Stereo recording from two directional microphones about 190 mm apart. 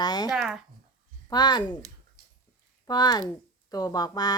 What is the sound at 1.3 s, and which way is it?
Speech, 20° left (ahead or behind).